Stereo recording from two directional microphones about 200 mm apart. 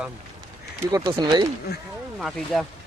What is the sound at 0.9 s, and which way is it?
Speech, 20° right (ahead or behind).